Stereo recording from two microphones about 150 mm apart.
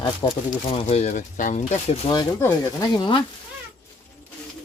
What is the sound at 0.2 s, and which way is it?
Speech, 35° left (ahead or behind).